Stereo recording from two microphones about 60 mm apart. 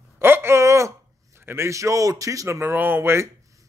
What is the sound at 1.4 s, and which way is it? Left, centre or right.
Speech, right.